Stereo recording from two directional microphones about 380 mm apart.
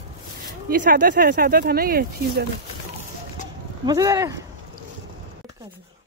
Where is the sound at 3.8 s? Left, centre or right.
Centre.